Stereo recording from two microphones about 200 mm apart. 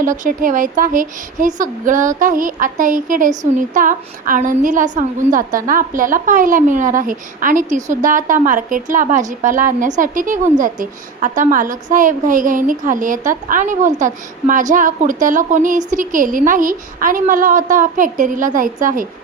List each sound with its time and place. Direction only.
0.0 s a woman's voice: 40° right (ahead or behind)